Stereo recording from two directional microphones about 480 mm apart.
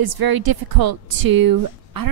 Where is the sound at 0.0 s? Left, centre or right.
Right.